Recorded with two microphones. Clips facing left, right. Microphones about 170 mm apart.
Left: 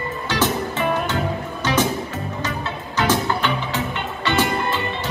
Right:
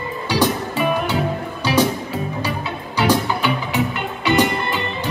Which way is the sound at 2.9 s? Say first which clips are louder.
Right 2 dB; 10° right (ahead or behind).